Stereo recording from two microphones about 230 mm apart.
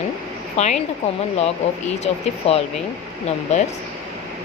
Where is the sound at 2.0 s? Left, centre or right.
Left.